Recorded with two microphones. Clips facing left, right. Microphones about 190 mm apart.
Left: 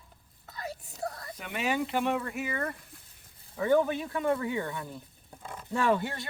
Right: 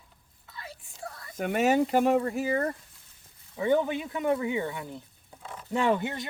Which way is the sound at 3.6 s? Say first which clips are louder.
Even; 20° right (ahead or behind).